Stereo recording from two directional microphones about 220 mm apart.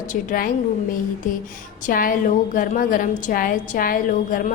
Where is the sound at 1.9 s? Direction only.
40° left (ahead or behind).